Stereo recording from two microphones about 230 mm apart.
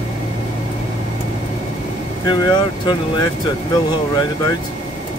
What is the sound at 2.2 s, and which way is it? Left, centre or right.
Speech, centre.